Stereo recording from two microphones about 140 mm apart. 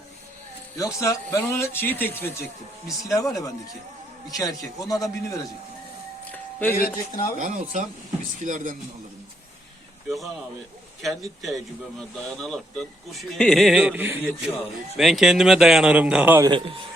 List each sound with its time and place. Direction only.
0.8 s speech: 25° left (ahead or behind)
6.3 s music: 15° left (ahead or behind)
6.7 s a man's voice: 90° left
7.3 s a man's voice: 65° right (ahead or behind)
11.0 s speech: centre (ahead or behind)
14.9 s speech: centre (ahead or behind)
16.5 s speech: 40° right (ahead or behind)